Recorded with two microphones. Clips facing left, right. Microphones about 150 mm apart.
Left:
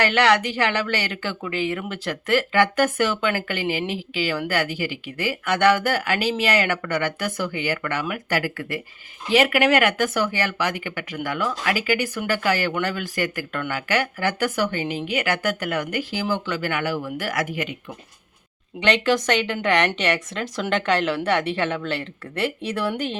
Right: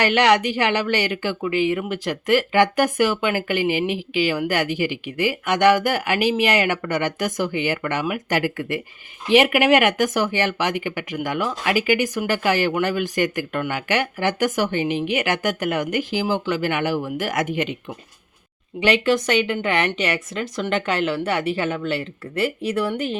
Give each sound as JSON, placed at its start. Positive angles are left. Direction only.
{"t": 0.0, "sound": "speech", "side_deg": -15}
{"t": 18.8, "sound": "a woman's voice", "side_deg": -5}